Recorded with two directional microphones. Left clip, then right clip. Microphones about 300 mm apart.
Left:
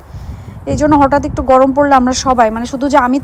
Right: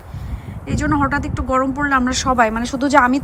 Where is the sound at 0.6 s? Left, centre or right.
Centre.